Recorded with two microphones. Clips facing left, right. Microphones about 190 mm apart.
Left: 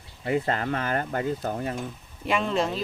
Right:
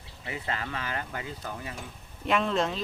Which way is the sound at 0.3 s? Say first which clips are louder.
Left 9 dB; 50° left (ahead or behind).